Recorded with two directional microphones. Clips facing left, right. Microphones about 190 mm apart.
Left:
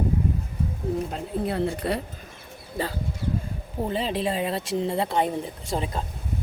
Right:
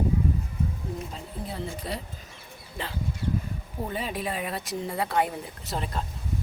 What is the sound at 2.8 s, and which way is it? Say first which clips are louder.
Speech: left 7 dB; 40° left (ahead or behind).